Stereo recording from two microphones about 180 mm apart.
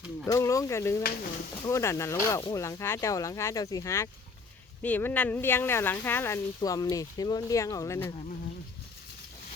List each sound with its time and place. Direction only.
0.3 s speech: 15° left (ahead or behind)
1.0 s speech: 55° left (ahead or behind)
1.6 s speech: 15° left (ahead or behind)